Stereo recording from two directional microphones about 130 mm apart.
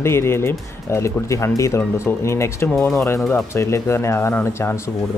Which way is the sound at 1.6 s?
20° left (ahead or behind).